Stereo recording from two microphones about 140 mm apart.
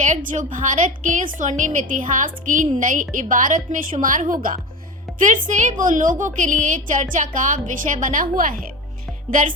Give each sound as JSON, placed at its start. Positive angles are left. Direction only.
{"t": 0.0, "sound": "a woman's voice", "side_deg": -60}